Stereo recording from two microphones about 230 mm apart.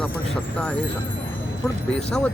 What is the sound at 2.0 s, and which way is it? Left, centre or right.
Speech, centre.